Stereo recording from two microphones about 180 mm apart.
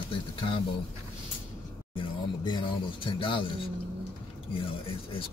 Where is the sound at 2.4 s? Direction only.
25° left (ahead or behind).